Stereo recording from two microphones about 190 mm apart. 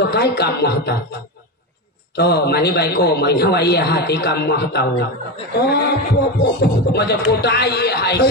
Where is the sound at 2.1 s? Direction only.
60° left (ahead or behind).